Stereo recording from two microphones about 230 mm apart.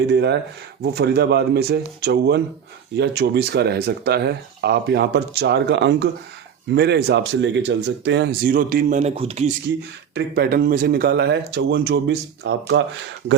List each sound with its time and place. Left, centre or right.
0.1 s speech: right
10.2 s speech: right